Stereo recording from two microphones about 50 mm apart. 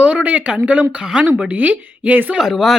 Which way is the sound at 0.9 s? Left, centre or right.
Centre.